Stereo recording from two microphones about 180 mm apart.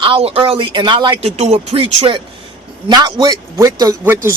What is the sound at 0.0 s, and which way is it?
A man's voice, 30° right (ahead or behind).